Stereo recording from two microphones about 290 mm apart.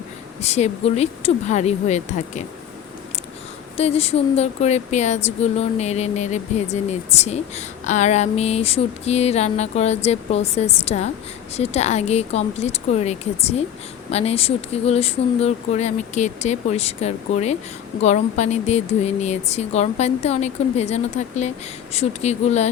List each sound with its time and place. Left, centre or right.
0.4 s speech: left
3.8 s speech: left